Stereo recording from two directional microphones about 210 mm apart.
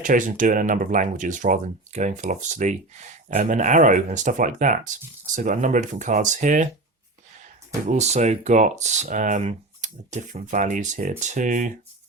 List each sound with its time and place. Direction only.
0.0 s speech: 40° right (ahead or behind)
7.9 s speech: 30° right (ahead or behind)